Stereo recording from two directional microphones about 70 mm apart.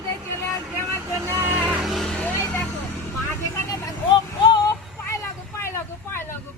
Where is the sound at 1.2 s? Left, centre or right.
Right.